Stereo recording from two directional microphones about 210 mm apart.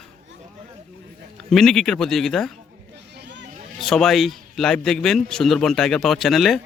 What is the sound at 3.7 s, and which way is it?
A man's voice, centre (ahead or behind).